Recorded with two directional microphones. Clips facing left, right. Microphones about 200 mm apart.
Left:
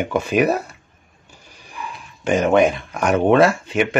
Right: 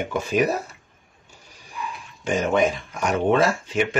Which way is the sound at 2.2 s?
65° left (ahead or behind).